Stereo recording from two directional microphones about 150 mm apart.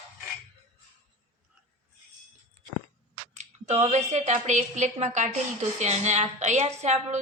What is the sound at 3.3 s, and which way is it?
A woman's voice, 50° right (ahead or behind).